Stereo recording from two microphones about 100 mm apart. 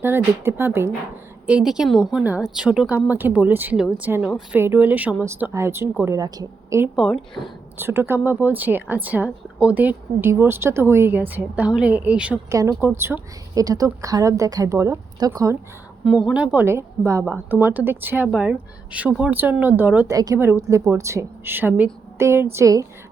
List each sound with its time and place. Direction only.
0.0 s speech: 25° right (ahead or behind)
1.5 s a woman's voice: 10° right (ahead or behind)
4.2 s a woman's voice: 5° right (ahead or behind)
4.5 s speech: 20° right (ahead or behind)
6.1 s a woman's voice: 40° right (ahead or behind)
7.8 s speech: 25° right (ahead or behind)
12.5 s speech: 30° right (ahead or behind)
13.5 s a woman's voice: 35° right (ahead or behind)
16.0 s speech: 5° right (ahead or behind)
16.6 s speech: 25° right (ahead or behind)
18.3 s speech: 10° right (ahead or behind)
20.1 s a woman's voice: 35° right (ahead or behind)
20.4 s a woman's voice: 25° right (ahead or behind)